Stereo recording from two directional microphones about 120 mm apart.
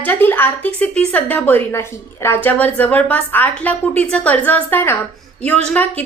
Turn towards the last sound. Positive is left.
turn(degrees=10)  # may be behind; listen again after turning